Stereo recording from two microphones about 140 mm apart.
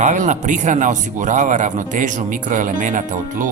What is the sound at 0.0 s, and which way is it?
A man's voice, 60° right (ahead or behind).